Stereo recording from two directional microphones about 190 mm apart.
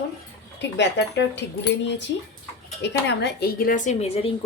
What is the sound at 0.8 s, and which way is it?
Speech, 65° left (ahead or behind).